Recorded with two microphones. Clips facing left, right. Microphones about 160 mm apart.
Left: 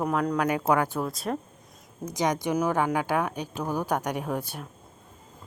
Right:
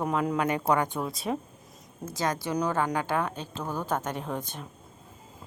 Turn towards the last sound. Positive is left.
turn(degrees=10)  # may be behind; listen again after turning